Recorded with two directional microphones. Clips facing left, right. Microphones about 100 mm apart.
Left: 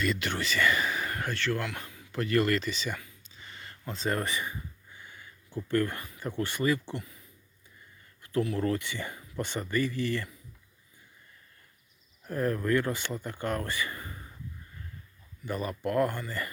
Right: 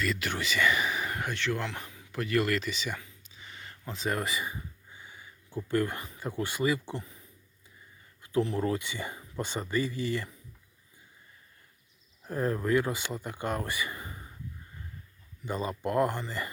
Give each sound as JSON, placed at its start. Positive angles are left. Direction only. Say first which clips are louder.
{"t": 0.0, "sound": "speech", "louder": "left 1 dB", "side_deg": 0}
{"t": 2.2, "sound": "speech", "louder": "left 2 dB", "side_deg": -5}
{"t": 3.0, "sound": "a sound", "louder": "even", "side_deg": -10}
{"t": 4.4, "sound": "a sound", "louder": "even", "side_deg": -15}
{"t": 8.2, "sound": "speech", "louder": "even", "side_deg": -20}
{"t": 12.3, "sound": "speech", "louder": "even", "side_deg": -20}
{"t": 15.4, "sound": "speech", "louder": "even", "side_deg": -25}